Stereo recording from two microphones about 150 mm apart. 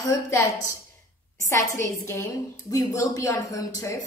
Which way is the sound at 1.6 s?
20° left (ahead or behind).